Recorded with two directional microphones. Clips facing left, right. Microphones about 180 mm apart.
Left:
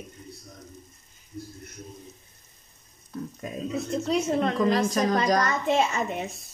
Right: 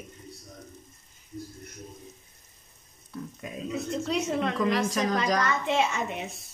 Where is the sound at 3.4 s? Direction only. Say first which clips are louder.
Left 2 dB; 45° left (ahead or behind).